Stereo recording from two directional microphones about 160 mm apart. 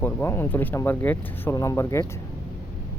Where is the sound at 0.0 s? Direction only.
15° left (ahead or behind).